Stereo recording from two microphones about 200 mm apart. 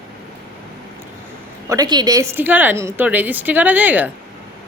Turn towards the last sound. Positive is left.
turn(degrees=-10)  # may be behind; listen again after turning